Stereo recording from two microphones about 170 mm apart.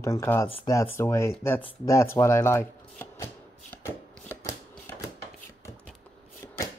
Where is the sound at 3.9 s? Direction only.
15° left (ahead or behind).